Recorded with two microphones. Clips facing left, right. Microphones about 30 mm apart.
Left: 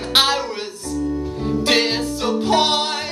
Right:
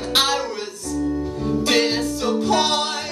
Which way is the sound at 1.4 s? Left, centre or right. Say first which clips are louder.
Left 1 dB; left.